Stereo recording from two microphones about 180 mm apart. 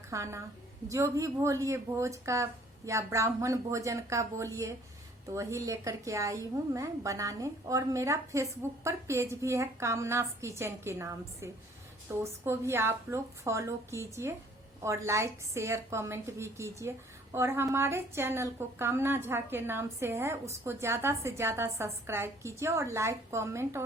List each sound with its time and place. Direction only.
0.1 s a woman's voice: 15° right (ahead or behind)